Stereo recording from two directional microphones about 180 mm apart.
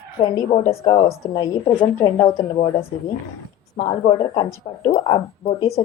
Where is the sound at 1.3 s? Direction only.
20° left (ahead or behind).